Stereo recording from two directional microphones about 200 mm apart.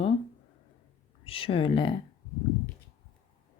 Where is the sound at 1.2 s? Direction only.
25° left (ahead or behind).